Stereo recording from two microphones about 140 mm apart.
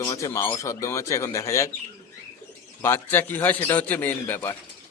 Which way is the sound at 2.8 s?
15° left (ahead or behind).